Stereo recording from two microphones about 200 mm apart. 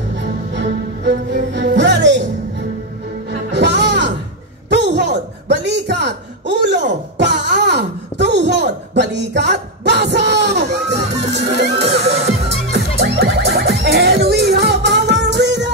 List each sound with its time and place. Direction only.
0.5 s music: 60° right (ahead or behind)
3.3 s music: 60° right (ahead or behind)
4.6 s a sound: 55° right (ahead or behind)
11.3 s music: 60° right (ahead or behind)